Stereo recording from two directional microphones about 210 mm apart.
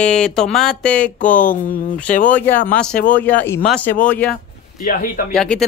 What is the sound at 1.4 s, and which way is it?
Speech, 40° left (ahead or behind).